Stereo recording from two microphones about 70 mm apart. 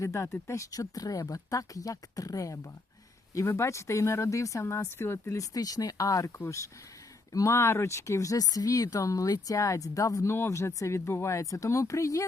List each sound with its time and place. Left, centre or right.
0.0 s speech: left
3.3 s speech: left
5.5 s speech: left